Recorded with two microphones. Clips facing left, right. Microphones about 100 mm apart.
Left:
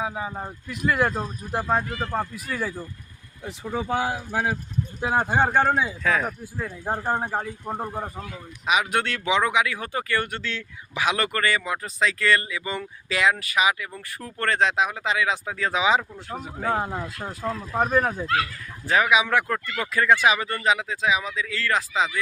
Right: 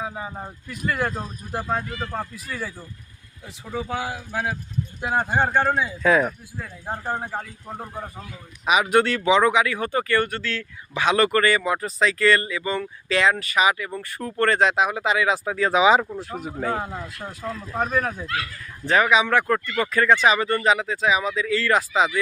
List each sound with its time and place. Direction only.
0.0 s a man's voice: 10° left (ahead or behind)
3.4 s a man's voice: 20° left (ahead or behind)
5.3 s a man's voice: 5° left (ahead or behind)
6.0 s speech: 15° right (ahead or behind)
6.8 s speech: 20° left (ahead or behind)
8.6 s speech: 5° right (ahead or behind)
10.2 s a man's voice: 15° left (ahead or behind)
11.0 s speech: 5° left (ahead or behind)
17.5 s a man's voice: 10° left (ahead or behind); by 22.2 s 5° right (ahead or behind)